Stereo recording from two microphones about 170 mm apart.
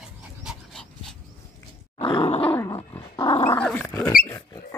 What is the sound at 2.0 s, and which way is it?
Grunt, 30° left (ahead or behind).